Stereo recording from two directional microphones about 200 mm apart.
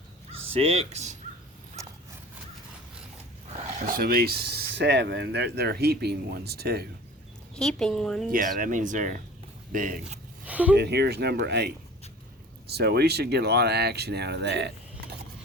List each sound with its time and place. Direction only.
0.5 s speech: 30° right (ahead or behind)
1.8 s horse: 15° right (ahead or behind)
3.8 s speech: 45° right (ahead or behind)
7.5 s speech: 5° left (ahead or behind)
8.5 s speech: 40° right (ahead or behind)
10.4 s a sound: 5° right (ahead or behind)
10.8 s speech: 55° right (ahead or behind)